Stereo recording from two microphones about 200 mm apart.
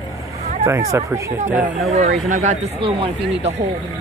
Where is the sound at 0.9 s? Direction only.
15° right (ahead or behind).